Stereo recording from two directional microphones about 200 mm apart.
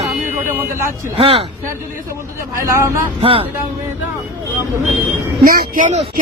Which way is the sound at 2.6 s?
15° right (ahead or behind).